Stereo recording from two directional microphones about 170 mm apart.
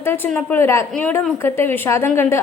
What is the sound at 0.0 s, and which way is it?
A woman's voice, 15° left (ahead or behind).